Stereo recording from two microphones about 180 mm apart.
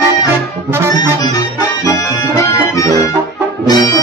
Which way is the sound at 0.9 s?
20° left (ahead or behind).